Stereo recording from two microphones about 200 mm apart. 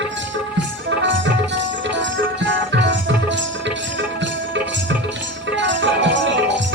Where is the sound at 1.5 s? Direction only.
65° right (ahead or behind).